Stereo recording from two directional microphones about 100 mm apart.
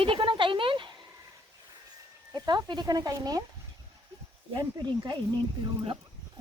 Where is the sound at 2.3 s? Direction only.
45° right (ahead or behind).